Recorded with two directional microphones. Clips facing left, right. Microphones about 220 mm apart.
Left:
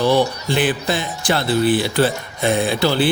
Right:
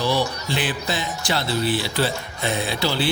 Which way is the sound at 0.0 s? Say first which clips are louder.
Left 6 dB; 55° left (ahead or behind).